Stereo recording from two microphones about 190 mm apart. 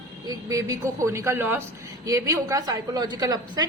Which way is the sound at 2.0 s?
15° right (ahead or behind).